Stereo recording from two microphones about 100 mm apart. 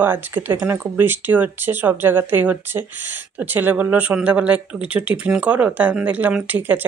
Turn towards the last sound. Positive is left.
turn(degrees=-20)  # may be behind; listen again after turning